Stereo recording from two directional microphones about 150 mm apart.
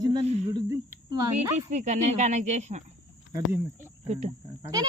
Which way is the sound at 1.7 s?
50° right (ahead or behind).